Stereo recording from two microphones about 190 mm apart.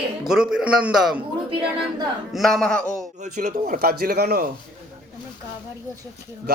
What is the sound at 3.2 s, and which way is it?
Speech, 40° right (ahead or behind).